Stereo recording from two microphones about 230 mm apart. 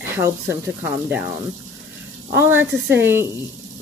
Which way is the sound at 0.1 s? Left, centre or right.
Centre.